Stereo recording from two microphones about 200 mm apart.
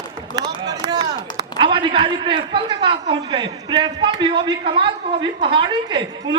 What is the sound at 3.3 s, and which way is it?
A woman's voice, 20° right (ahead or behind).